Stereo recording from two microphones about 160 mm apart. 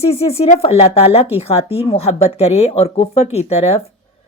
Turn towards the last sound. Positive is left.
turn(degrees=40)  # may be behind; listen again after turning